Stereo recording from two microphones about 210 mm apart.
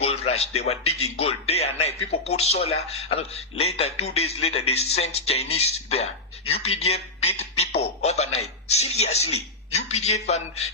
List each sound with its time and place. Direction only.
0.0 s a man's voice: 30° left (ahead or behind)